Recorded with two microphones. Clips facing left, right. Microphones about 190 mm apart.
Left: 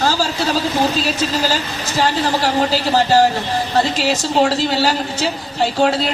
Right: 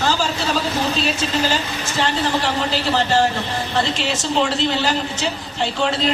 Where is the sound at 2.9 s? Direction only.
35° left (ahead or behind).